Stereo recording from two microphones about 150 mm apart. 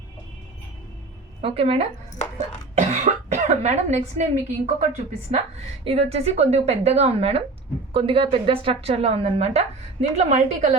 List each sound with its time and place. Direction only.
1.4 s a woman's voice: 40° right (ahead or behind)